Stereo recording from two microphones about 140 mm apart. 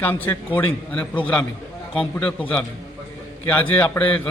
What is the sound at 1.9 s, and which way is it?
A man's voice, 5° left (ahead or behind).